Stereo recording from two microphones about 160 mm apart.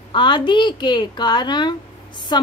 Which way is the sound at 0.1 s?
30° left (ahead or behind).